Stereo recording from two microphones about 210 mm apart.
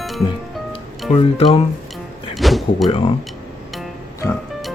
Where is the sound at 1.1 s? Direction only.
25° left (ahead or behind).